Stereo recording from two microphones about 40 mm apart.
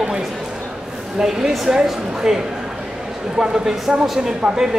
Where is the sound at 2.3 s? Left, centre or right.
Centre.